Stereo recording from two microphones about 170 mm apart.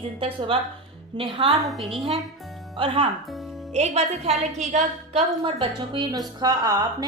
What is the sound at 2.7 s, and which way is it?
A woman's voice, 30° right (ahead or behind).